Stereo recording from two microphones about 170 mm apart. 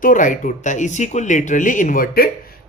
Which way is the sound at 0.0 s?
50° left (ahead or behind).